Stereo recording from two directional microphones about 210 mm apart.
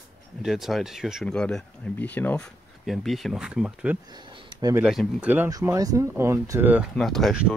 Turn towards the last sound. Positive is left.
turn(degrees=0)  # may be behind; listen again after turning